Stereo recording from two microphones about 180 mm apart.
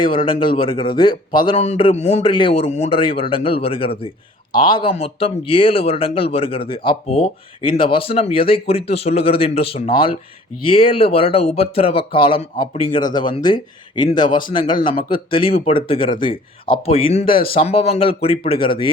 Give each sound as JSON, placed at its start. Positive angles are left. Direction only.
{"t": 0.1, "sound": "speech", "side_deg": 25}